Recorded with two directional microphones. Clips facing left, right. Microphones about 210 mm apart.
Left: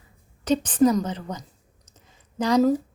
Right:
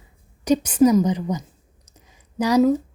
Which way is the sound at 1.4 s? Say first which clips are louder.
Right 3 dB; 10° right (ahead or behind).